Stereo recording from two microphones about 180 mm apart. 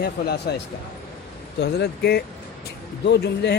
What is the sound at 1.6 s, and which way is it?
Speech, 65° left (ahead or behind).